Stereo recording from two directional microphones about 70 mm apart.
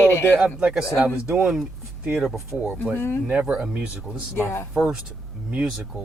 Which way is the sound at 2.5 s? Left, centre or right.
Centre.